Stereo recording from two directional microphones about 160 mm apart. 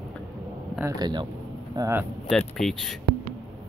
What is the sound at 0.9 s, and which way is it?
Speech, 25° right (ahead or behind).